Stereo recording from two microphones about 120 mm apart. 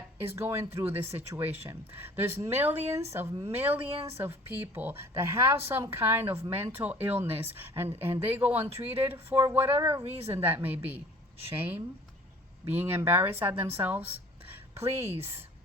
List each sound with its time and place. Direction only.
0.2 s speech: 20° right (ahead or behind)
0.9 s speech: 55° right (ahead or behind)
2.0 s speech: 15° right (ahead or behind)
3.8 s speech: 55° right (ahead or behind)
4.4 s speech: 20° right (ahead or behind)
8.5 s speech: 55° right (ahead or behind)
9.0 s speech: 15° right (ahead or behind)
10.0 s speech: 55° right (ahead or behind)
10.3 s speech: 15° right (ahead or behind)
12.8 s speech: 15° right (ahead or behind)
14.8 s speech: 60° right (ahead or behind)
15.2 s speech: 20° right (ahead or behind)